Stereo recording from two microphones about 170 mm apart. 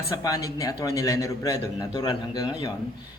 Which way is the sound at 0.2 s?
20° left (ahead or behind).